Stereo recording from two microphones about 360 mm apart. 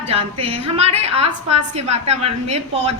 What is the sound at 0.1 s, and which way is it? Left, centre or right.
A woman's voice, centre.